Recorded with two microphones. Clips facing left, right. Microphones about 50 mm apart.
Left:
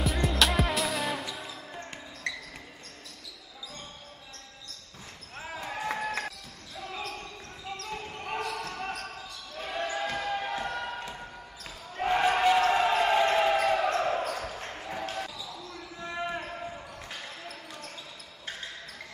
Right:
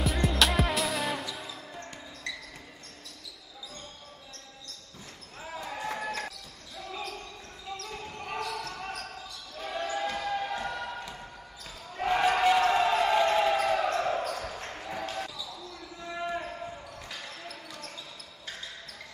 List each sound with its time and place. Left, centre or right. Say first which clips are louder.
0.0 s music: even; centre
5.4 s basketball bounce: left 1 dB; left
7.9 s basketball bounce: left 3 dB; left
9.9 s basketball bounce: right 2 dB; centre
12.0 s a sound: even; centre
13.9 s basketball bounce: left 1 dB; centre
14.4 s basketball bounce: even; centre
16.2 s basketball bounce: right 1 dB; left
17.5 s basketball bounce: even; left